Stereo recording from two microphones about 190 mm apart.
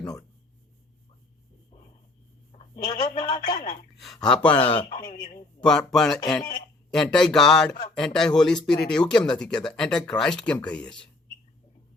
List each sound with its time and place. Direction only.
0.0 s a sound: 20° left (ahead or behind)
2.7 s speech: 20° left (ahead or behind)
3.9 s speech: centre (ahead or behind)
4.5 s speech: 30° left (ahead or behind)
5.5 s speech: 5° left (ahead or behind)